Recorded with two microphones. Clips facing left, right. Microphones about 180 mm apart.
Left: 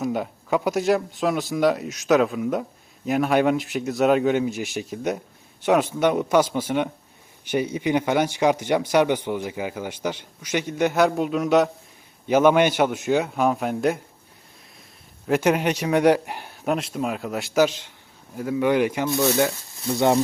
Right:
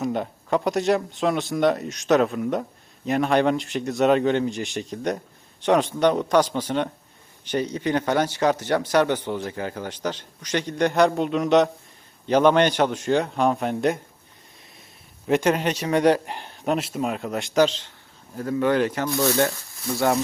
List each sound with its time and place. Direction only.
0.0 s speech: 5° left (ahead or behind)
15.3 s speech: 10° left (ahead or behind)